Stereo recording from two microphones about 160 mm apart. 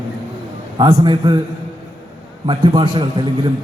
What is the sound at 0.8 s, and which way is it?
Speech, 25° right (ahead or behind).